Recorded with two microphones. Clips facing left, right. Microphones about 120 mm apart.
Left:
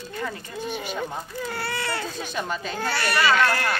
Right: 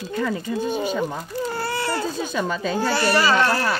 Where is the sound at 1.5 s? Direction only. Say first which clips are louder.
Right 3 dB; 40° right (ahead or behind).